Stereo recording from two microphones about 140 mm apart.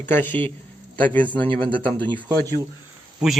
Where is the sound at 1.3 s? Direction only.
35° right (ahead or behind).